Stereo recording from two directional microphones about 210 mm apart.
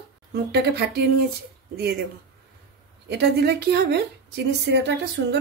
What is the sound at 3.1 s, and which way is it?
Speech, 50° right (ahead or behind).